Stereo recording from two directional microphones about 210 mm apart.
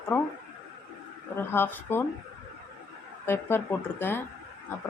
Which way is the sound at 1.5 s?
10° left (ahead or behind).